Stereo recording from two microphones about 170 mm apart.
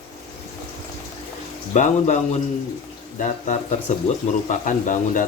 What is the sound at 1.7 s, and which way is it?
Speech, 45° left (ahead or behind).